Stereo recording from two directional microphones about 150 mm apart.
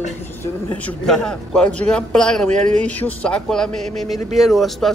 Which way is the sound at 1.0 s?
5° left (ahead or behind).